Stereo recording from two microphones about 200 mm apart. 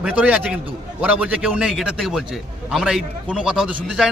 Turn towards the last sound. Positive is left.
turn(degrees=-5)  # may be behind; listen again after turning